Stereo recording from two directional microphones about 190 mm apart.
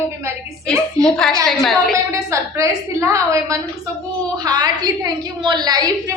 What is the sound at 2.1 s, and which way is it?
A woman's voice, 15° right (ahead or behind).